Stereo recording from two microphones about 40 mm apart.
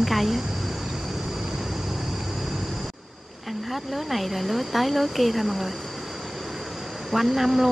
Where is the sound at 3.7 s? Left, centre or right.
Centre.